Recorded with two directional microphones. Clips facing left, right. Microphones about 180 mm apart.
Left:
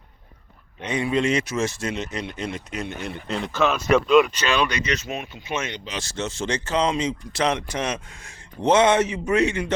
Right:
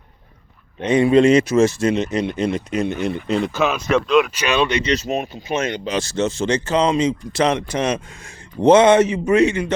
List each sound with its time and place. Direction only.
0.8 s speech: 30° right (ahead or behind)
3.0 s speech: 15° right (ahead or behind)
4.4 s speech: 20° right (ahead or behind)